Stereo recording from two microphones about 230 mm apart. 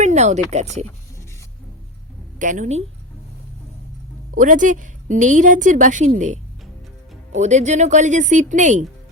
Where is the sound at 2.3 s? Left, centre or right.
Right.